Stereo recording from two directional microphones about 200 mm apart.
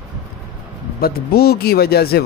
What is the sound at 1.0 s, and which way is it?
Speech, 50° left (ahead or behind).